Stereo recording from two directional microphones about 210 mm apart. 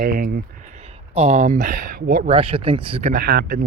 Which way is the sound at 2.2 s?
25° right (ahead or behind).